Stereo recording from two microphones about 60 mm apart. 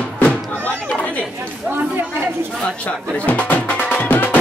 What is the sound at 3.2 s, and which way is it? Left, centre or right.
Music, left.